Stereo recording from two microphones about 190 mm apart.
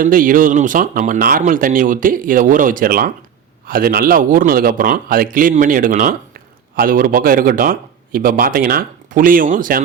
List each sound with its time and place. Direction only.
0.0 s speech: 45° right (ahead or behind)